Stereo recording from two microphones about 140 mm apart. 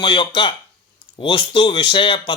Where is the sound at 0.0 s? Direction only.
35° left (ahead or behind).